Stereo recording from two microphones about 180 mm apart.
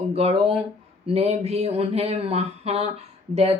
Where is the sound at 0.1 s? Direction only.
35° right (ahead or behind).